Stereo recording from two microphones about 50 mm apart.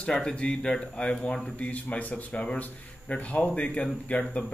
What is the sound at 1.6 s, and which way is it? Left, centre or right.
Speech, left.